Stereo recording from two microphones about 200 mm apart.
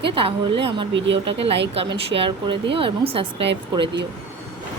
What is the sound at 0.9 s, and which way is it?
Speech, 65° right (ahead or behind).